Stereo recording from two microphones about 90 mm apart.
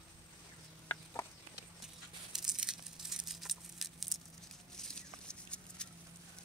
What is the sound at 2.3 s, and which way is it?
Tearing, 5° right (ahead or behind).